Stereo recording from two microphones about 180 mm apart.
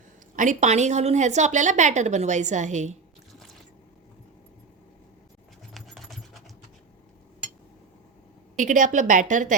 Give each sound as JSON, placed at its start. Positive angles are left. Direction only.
{"t": 0.3, "sound": "a woman's voice", "side_deg": -40}
{"t": 5.7, "sound": "sewing machine", "side_deg": 0}
{"t": 8.5, "sound": "a woman's voice", "side_deg": -45}